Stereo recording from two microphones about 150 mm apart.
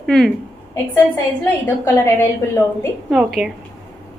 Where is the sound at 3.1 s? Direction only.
Centre (ahead or behind).